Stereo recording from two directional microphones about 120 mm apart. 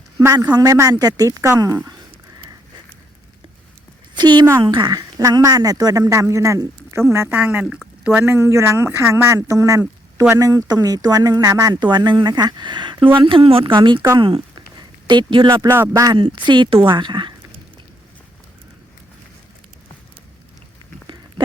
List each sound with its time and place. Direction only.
0.5 s speech: 30° right (ahead or behind)
4.1 s a sound: 40° right (ahead or behind)
4.6 s speech: 40° right (ahead or behind)
14.2 s a sound: 45° right (ahead or behind)
15.4 s speech: 20° right (ahead or behind)
16.1 s speech: 40° right (ahead or behind)